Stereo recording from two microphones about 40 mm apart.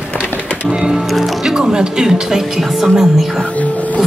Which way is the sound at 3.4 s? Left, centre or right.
Left.